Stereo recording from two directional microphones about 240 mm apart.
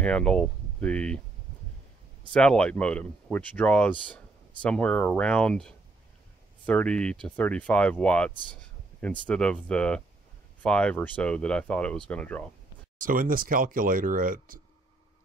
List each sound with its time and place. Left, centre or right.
0.0 s speech: centre
2.3 s speech: centre
13.0 s speech: right